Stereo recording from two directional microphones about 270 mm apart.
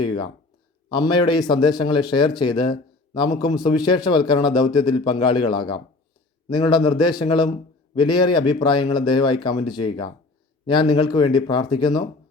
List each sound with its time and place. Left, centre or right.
0.0 s a man's voice: centre